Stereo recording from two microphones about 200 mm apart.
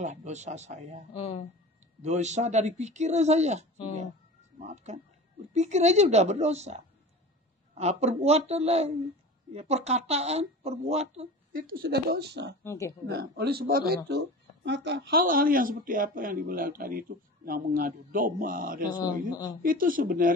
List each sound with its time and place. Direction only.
0.0 s speech: 35° right (ahead or behind)
1.1 s speech: 30° left (ahead or behind)
2.0 s speech: 35° right (ahead or behind); by 12.5 s 55° right (ahead or behind)
12.6 s speech: 15° left (ahead or behind)
13.1 s speech: 50° right (ahead or behind)
19.3 s speech: 15° left (ahead or behind)
19.6 s speech: 45° right (ahead or behind)